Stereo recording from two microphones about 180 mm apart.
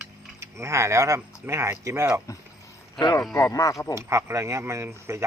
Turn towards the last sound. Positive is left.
turn(degrees=-15)  # may be behind; listen again after turning